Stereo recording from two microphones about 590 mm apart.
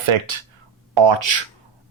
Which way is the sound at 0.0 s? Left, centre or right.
Right.